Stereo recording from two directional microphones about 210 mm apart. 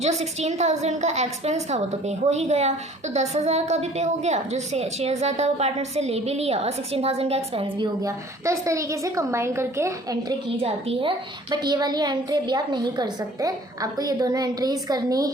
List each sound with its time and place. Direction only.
0.0 s a woman's voice: 30° right (ahead or behind); by 10.3 s 15° right (ahead or behind)
10.6 s a woman's voice: 25° right (ahead or behind)